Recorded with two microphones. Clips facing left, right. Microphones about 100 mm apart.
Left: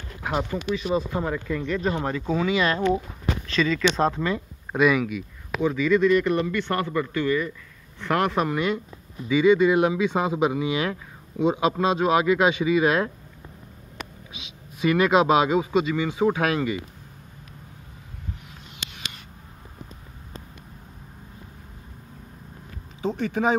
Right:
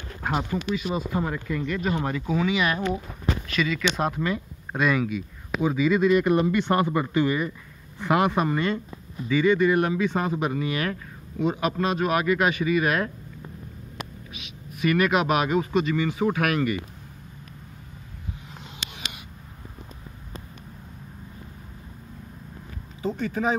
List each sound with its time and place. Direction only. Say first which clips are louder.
0.3 s speech: left 1 dB; 15° right (ahead or behind)
2.4 s speech: left 4 dB; 20° right (ahead or behind)
4.7 s speech: left 3 dB; 5° left (ahead or behind)
5.6 s speech: left 1 dB; 10° right (ahead or behind)
8.0 s speech: right 1 dB; 10° right (ahead or behind)
9.3 s speech: left 2 dB; 15° left (ahead or behind)
14.3 s speech: right 2 dB; 25° left (ahead or behind)
23.1 s speech: left 3 dB; 70° left (ahead or behind)